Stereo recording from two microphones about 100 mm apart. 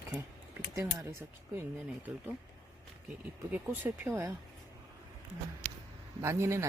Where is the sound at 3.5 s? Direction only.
20° right (ahead or behind).